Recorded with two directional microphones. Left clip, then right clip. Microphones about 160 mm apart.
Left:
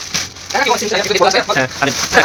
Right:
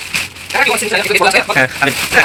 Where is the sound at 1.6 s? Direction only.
5° left (ahead or behind).